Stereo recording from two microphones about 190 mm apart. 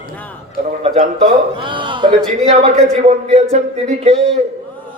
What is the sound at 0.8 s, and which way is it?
A man's voice, 35° right (ahead or behind).